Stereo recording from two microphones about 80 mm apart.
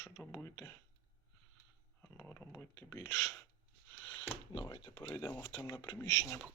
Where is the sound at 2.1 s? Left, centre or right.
Left.